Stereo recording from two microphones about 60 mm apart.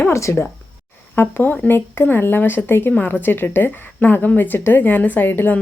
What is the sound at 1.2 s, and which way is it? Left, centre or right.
Speech, left.